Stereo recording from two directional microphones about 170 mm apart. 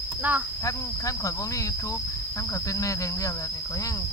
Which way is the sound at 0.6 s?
20° left (ahead or behind).